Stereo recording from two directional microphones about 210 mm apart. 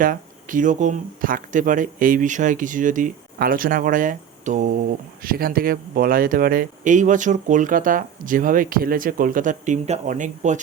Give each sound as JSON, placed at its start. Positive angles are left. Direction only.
{"t": 0.0, "sound": "speech", "side_deg": -40}